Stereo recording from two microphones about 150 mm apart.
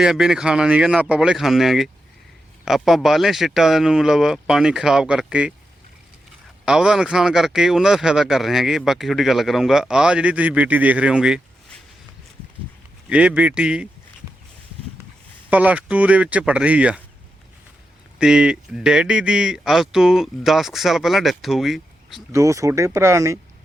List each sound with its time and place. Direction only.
0.0 s speech: 5° right (ahead or behind)
6.7 s speech: 5° right (ahead or behind)
13.1 s speech: 10° right (ahead or behind)
15.4 s speech: 10° right (ahead or behind)
18.2 s speech: 5° right (ahead or behind)
22.3 s speech: 20° right (ahead or behind)